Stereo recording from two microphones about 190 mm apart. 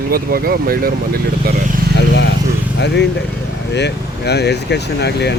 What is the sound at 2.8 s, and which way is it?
Speech, 60° left (ahead or behind).